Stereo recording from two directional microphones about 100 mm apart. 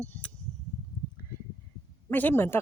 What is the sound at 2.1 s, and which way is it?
Speech, 20° left (ahead or behind).